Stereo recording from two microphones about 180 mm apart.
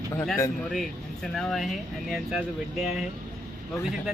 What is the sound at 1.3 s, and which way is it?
Speech, centre (ahead or behind).